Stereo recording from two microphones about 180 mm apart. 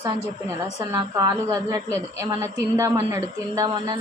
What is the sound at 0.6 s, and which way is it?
A woman's voice, 20° right (ahead or behind).